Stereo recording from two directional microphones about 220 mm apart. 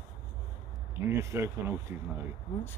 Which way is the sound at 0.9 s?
10° right (ahead or behind).